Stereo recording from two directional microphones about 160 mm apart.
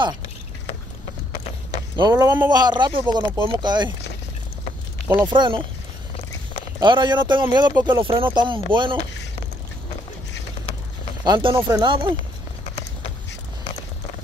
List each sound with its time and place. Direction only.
2.0 s speech: 25° right (ahead or behind)
5.2 s speech: 30° right (ahead or behind)
6.8 s speech: 30° right (ahead or behind)
11.2 s speech: 30° right (ahead or behind)